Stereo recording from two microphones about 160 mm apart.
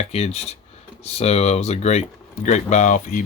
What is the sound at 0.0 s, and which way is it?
Speech, 40° left (ahead or behind).